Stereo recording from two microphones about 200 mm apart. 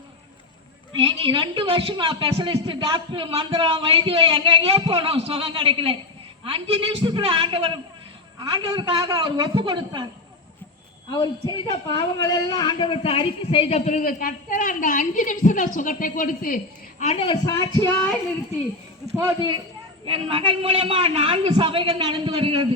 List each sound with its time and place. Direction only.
1.2 s a woman's voice: 25° right (ahead or behind)
11.2 s a woman's voice: 20° left (ahead or behind); by 16.6 s 45° left (ahead or behind)
17.0 s speech: 30° left (ahead or behind); by 18.1 s 15° left (ahead or behind)
20.1 s a woman's voice: 25° right (ahead or behind)